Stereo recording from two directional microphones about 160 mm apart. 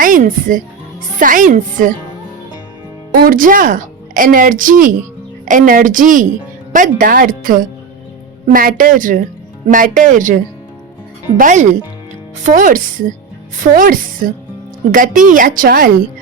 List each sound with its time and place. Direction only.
0.0 s a woman's voice: 60° right (ahead or behind)
3.1 s a woman's voice: 60° right (ahead or behind)